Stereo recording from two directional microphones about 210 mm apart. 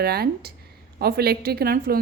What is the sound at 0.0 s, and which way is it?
A woman's voice, 50° right (ahead or behind).